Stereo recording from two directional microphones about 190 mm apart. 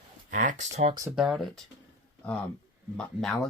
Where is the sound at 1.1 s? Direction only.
Centre (ahead or behind).